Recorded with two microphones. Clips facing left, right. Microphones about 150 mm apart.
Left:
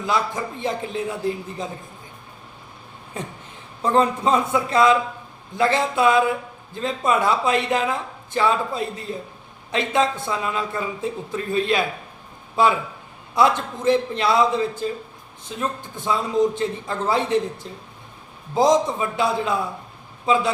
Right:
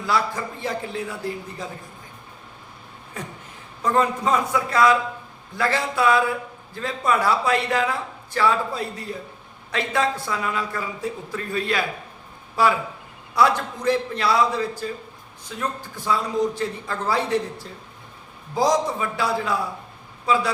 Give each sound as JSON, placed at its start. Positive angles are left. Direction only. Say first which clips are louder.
{"t": 0.0, "sound": "a woman's voice", "louder": "left 1 dB", "side_deg": 20}
{"t": 3.2, "sound": "a woman's voice", "louder": "left 3 dB", "side_deg": 25}